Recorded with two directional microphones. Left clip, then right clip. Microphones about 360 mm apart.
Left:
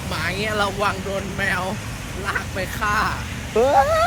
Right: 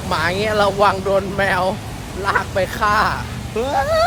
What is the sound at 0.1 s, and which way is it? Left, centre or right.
Speech, centre.